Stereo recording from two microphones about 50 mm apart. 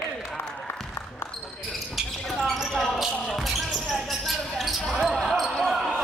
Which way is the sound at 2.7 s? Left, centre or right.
Centre.